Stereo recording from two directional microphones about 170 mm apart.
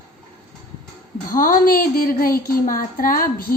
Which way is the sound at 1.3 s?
55° left (ahead or behind).